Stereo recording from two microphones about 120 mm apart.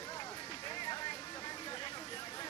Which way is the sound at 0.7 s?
40° left (ahead or behind).